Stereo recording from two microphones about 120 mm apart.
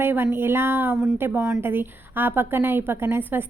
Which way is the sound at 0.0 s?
15° right (ahead or behind).